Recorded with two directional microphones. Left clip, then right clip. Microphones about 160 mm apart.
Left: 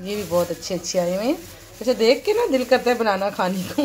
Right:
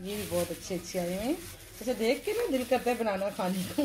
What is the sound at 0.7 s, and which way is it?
Speech, 5° left (ahead or behind).